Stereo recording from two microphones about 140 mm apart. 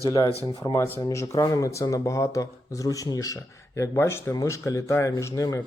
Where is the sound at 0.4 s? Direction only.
20° left (ahead or behind).